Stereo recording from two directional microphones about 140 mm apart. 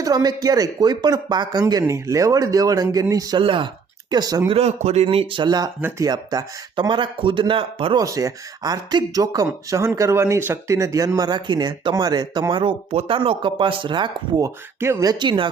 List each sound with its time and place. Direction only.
0.0 s speech: 30° right (ahead or behind)
3.4 s speech: 35° right (ahead or behind)
4.4 s speech: 50° right (ahead or behind)
7.9 s speech: 25° right (ahead or behind)
15.2 s speech: 35° right (ahead or behind)